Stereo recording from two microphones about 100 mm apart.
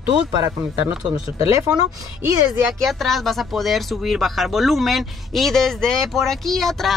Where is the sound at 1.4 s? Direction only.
30° right (ahead or behind).